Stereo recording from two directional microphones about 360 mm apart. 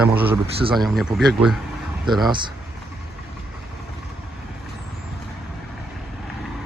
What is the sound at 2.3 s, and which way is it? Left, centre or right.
Speech, centre.